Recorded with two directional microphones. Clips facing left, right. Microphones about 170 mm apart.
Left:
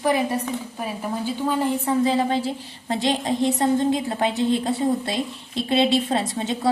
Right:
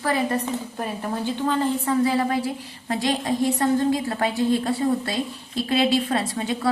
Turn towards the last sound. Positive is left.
turn(degrees=25)  # may be behind; listen again after turning